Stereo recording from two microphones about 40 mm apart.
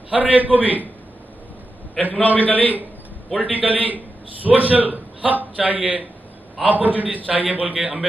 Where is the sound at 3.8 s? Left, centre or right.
Right.